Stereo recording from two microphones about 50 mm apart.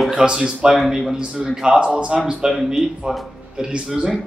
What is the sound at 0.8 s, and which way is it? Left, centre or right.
A man's voice, centre.